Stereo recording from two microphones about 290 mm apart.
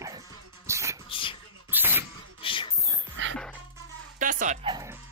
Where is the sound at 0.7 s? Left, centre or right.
Centre.